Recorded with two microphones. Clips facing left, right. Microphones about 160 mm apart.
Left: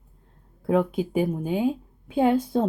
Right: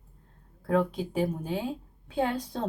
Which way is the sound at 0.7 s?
10° left (ahead or behind).